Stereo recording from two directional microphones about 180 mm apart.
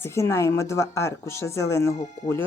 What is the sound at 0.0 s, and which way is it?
Speech, 15° left (ahead or behind).